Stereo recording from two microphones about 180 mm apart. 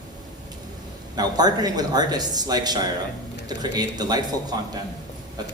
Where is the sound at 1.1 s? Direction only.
20° right (ahead or behind).